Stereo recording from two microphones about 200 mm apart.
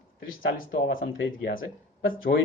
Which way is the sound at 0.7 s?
65° left (ahead or behind).